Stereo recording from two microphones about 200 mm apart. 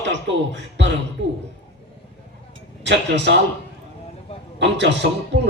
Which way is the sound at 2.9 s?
60° right (ahead or behind).